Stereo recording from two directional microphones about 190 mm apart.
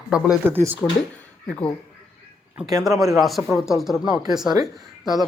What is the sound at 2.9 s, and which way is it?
Speech, 15° right (ahead or behind).